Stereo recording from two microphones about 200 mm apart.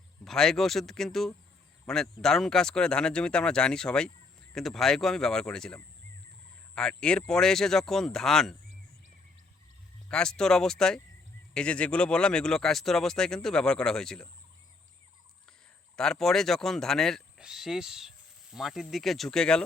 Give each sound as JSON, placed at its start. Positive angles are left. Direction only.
{"t": 0.3, "sound": "speech", "side_deg": 0}
{"t": 10.1, "sound": "speech", "side_deg": 5}
{"t": 16.0, "sound": "speech", "side_deg": 0}